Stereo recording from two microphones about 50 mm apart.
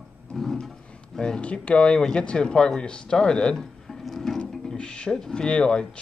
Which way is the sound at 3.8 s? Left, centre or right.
Centre.